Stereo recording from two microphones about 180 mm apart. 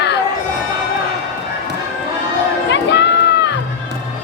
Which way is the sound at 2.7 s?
70° left (ahead or behind).